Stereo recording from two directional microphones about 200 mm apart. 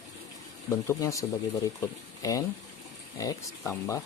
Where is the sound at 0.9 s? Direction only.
15° left (ahead or behind).